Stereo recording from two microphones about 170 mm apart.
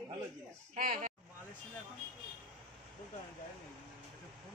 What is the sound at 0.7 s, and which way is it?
Speech, 55° right (ahead or behind).